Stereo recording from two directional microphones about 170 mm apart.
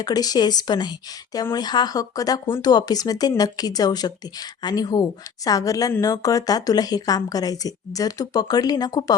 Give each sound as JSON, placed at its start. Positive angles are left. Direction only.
{"t": 0.0, "sound": "a woman's voice", "side_deg": 20}